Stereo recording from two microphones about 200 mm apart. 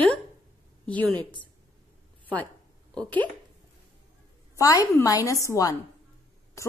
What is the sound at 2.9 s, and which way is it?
Speech, 5° left (ahead or behind).